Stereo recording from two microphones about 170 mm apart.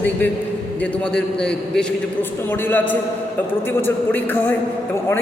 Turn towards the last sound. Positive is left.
turn(degrees=10)  # may be behind; listen again after turning